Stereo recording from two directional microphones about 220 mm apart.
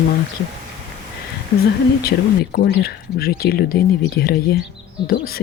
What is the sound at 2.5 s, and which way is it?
Speech, 45° left (ahead or behind).